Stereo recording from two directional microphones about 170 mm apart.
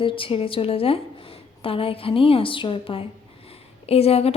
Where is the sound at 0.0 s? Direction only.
30° left (ahead or behind).